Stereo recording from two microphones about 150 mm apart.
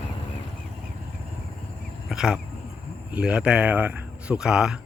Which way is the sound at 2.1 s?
Centre (ahead or behind).